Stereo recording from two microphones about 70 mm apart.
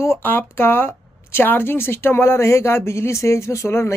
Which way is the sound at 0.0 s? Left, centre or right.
Left.